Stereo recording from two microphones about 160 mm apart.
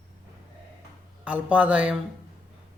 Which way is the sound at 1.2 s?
10° right (ahead or behind).